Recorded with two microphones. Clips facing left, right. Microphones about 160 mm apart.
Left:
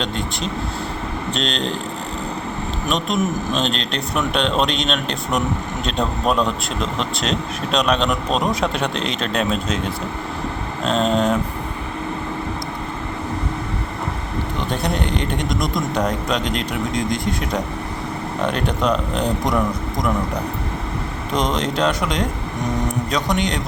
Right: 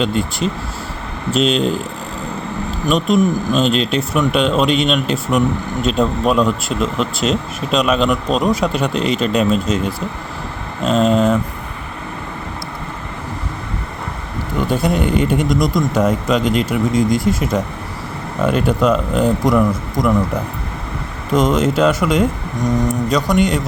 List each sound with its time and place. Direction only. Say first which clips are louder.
0.0 s speech: right 6 dB; 5° right (ahead or behind)
2.9 s speech: right 7 dB; centre (ahead or behind)
14.6 s speech: right 7 dB; 5° right (ahead or behind)
21.3 s speech: right 6 dB; centre (ahead or behind)
23.3 s speech: right 6 dB; centre (ahead or behind)